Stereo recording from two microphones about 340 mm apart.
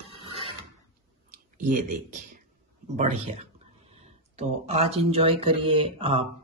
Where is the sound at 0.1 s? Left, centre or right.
Centre.